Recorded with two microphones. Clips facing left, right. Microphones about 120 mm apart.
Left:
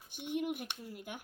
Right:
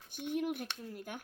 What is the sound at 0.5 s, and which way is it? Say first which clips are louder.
Speech: right 1 dB; 10° left (ahead or behind).